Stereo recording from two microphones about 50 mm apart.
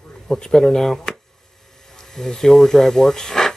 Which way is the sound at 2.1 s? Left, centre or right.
Centre.